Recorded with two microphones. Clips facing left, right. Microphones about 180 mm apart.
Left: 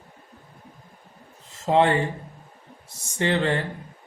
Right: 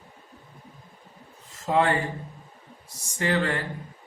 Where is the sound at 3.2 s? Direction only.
25° left (ahead or behind).